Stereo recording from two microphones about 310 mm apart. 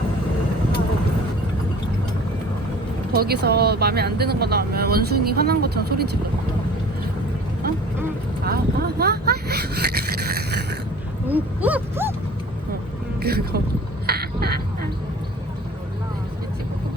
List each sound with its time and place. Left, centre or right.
3.2 s speech: right
8.4 s speech: right
10.3 s a sound: right
11.3 s speech: centre
13.2 s speech: right
14.1 s a sound: right